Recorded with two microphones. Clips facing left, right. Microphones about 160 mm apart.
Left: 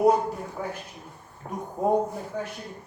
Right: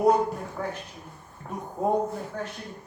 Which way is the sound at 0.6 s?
10° left (ahead or behind).